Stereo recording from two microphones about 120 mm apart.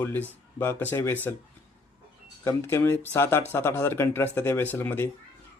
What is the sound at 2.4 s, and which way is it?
A man's voice, 20° left (ahead or behind).